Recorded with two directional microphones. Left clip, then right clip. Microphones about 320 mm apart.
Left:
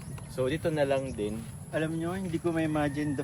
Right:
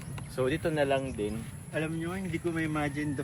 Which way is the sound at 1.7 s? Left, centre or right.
Left.